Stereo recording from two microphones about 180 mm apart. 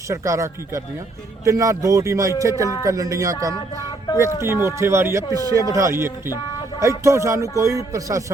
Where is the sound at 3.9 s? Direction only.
20° left (ahead or behind).